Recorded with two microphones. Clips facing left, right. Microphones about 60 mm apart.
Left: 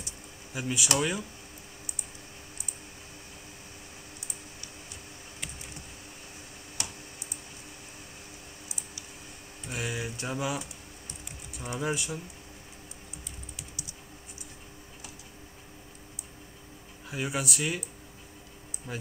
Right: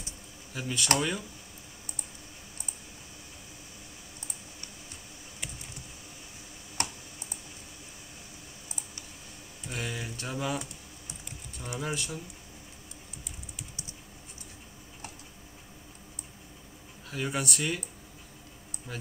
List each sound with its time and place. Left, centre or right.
0.5 s speech: centre
6.8 s computer keyboard: right
9.7 s speech: centre
11.8 s speech: centre
17.1 s speech: centre
18.9 s speech: centre